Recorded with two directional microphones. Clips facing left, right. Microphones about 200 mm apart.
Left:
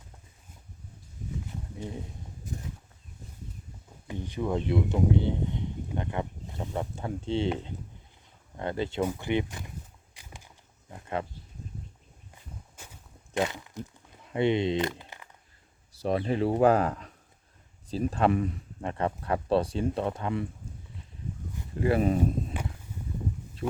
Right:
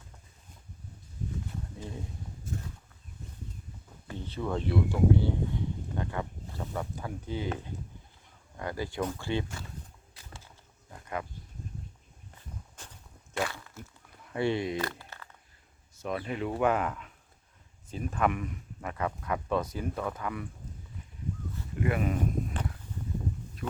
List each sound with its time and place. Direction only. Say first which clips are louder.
4.0 s speech: left 3 dB; 15° left (ahead or behind)
8.5 s speech: left 4 dB; 25° left (ahead or behind)
10.2 s wild animals: left 1 dB; 15° left (ahead or behind)
12.7 s a sound: left 1 dB; 10° left (ahead or behind)
15.9 s speech: left 6 dB; 35° left (ahead or behind)
21.8 s speech: left 5 dB; 30° left (ahead or behind)